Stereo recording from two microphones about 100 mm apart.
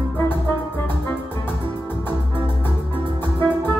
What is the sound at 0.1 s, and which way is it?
Music, 20° left (ahead or behind).